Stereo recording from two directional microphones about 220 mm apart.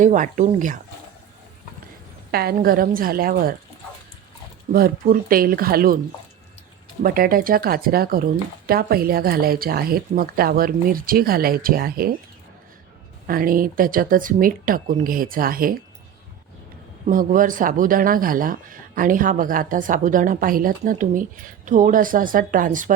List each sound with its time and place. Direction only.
0.0 s speech: 35° right (ahead or behind)
2.3 s speech: 45° right (ahead or behind)
4.7 s speech: 40° right (ahead or behind)
7.0 s speech: 40° right (ahead or behind)
13.2 s speech: 40° right (ahead or behind)
17.1 s speech: 40° right (ahead or behind)